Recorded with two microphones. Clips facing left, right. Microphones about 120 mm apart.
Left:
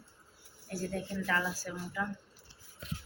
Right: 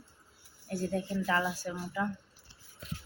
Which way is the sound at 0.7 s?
20° right (ahead or behind).